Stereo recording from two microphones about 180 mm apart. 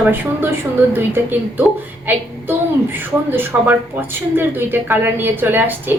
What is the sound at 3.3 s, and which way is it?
A woman's voice, 10° right (ahead or behind).